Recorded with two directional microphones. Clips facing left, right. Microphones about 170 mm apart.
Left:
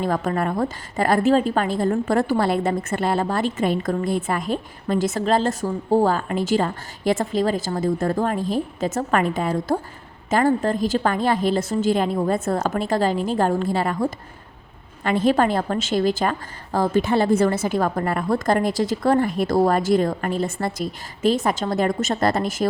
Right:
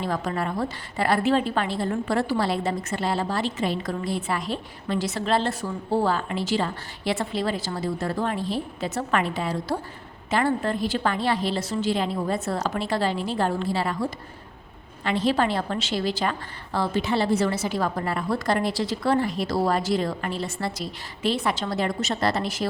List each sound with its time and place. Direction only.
0.0 s a woman's voice: 50° left (ahead or behind)